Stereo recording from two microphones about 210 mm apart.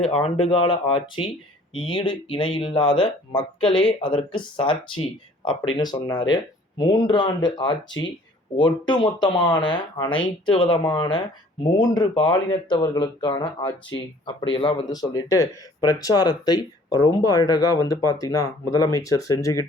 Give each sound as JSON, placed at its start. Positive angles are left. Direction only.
{"t": 0.0, "sound": "speech", "side_deg": 30}